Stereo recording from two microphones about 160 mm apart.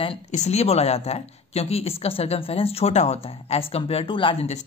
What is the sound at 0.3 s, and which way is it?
Speech, 45° left (ahead or behind).